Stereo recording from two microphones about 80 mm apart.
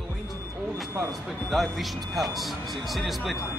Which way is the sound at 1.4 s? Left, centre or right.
Centre.